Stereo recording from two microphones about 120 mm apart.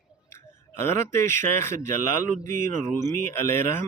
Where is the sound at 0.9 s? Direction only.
20° left (ahead or behind).